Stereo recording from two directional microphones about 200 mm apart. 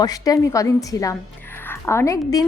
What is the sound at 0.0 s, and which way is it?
A woman's voice, 20° left (ahead or behind).